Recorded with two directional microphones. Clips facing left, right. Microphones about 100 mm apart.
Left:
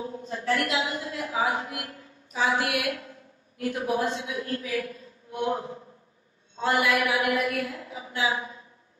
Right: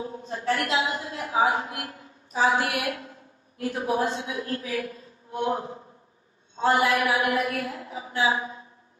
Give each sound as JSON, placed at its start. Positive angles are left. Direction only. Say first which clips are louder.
{"t": 0.3, "sound": "a woman's voice", "louder": "right 1 dB", "side_deg": -25}